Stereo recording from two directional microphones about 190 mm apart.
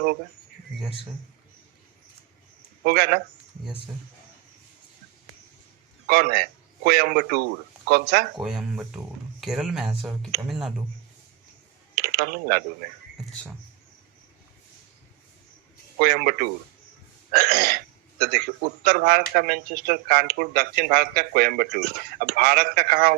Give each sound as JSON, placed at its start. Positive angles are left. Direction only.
{"t": 2.8, "sound": "speech", "side_deg": -55}
{"t": 6.1, "sound": "speech", "side_deg": -50}
{"t": 8.4, "sound": "speech", "side_deg": 0}
{"t": 11.9, "sound": "speech", "side_deg": -55}
{"t": 16.0, "sound": "speech", "side_deg": -50}
{"t": 17.3, "sound": "a sound", "side_deg": -55}
{"t": 18.2, "sound": "speech", "side_deg": -55}